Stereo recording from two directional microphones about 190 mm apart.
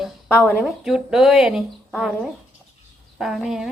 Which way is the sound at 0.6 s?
Centre (ahead or behind).